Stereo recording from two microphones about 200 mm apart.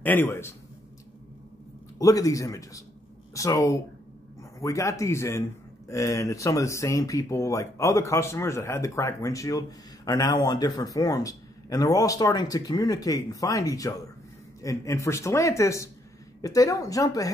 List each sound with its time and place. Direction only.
0.0 s speech: 10° left (ahead or behind)
2.0 s speech: 15° left (ahead or behind)